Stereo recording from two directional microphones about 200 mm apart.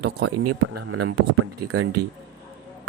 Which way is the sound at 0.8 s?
90° right.